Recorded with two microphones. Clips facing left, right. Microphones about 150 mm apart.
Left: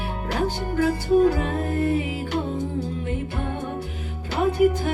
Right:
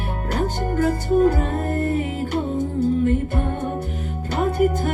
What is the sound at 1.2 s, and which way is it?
Music, 45° right (ahead or behind).